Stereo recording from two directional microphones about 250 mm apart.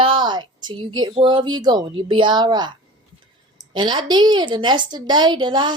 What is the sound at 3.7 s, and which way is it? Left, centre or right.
A woman's voice, centre.